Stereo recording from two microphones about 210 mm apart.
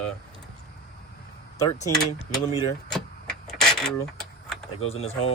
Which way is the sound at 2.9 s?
Centre (ahead or behind).